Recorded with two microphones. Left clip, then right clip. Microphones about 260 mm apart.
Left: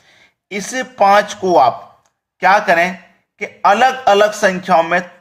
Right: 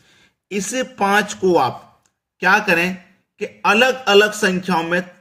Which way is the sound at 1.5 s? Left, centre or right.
Centre.